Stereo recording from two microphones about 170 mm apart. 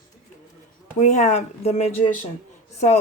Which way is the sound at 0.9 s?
45° left (ahead or behind).